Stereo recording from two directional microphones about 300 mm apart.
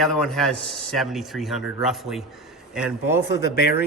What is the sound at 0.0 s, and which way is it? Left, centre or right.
A man's voice, centre.